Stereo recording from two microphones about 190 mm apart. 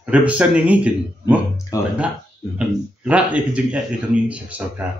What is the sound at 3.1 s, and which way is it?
Speech, 5° right (ahead or behind).